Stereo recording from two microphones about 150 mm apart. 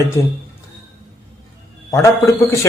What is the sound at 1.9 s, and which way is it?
Speech, 20° left (ahead or behind).